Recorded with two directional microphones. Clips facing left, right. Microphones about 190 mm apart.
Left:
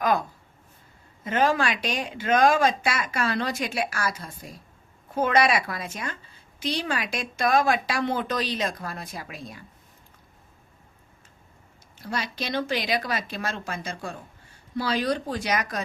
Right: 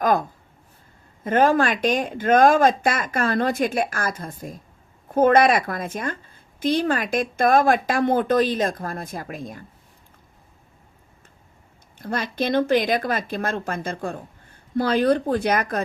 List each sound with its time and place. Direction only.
0.0 s a sound: 50° right (ahead or behind)
1.2 s a woman's voice: 50° right (ahead or behind)
11.9 s a woman's voice: 50° right (ahead or behind)